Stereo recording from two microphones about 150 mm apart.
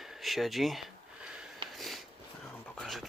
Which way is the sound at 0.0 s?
Centre (ahead or behind).